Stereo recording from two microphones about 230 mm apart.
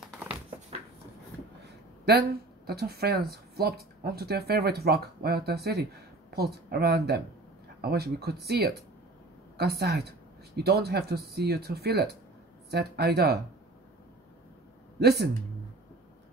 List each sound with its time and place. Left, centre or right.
2.0 s speech: right
15.0 s speech: right